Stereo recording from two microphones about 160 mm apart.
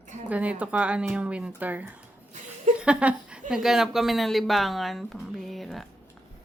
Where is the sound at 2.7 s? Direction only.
5° right (ahead or behind).